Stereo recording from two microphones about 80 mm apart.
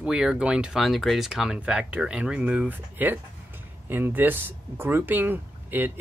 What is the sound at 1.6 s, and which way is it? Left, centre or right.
Speech, centre.